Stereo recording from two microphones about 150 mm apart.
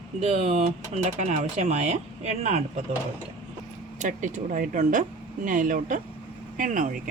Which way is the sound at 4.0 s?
55° right (ahead or behind).